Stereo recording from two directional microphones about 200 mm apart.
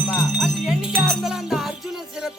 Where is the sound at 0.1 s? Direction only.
Centre (ahead or behind).